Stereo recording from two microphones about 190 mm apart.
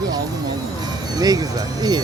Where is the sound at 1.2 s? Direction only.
20° right (ahead or behind).